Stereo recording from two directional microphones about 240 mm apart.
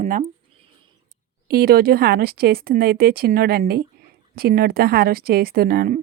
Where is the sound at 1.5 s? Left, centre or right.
Right.